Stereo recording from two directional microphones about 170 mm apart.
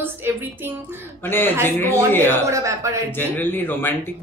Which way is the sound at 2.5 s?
20° right (ahead or behind).